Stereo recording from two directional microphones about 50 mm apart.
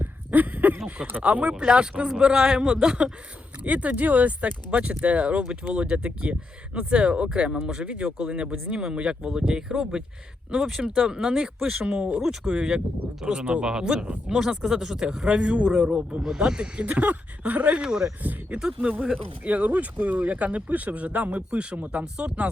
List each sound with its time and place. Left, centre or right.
0.0 s a sound: right
1.2 s speech: right
3.6 s speech: right
10.8 s speech: right
12.2 s speech: centre
16.8 s speech: right
17.8 s speech: centre
18.2 s speech: right